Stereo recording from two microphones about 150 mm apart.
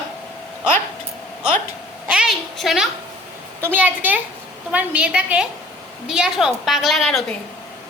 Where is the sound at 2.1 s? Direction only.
5° right (ahead or behind).